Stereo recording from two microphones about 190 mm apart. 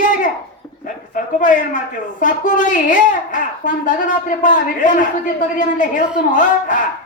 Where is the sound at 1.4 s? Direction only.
45° left (ahead or behind).